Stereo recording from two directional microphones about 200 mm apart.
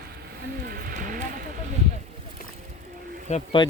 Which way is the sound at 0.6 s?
45° right (ahead or behind).